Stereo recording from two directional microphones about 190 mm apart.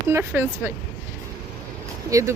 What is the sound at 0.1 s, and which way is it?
Speech, 15° right (ahead or behind).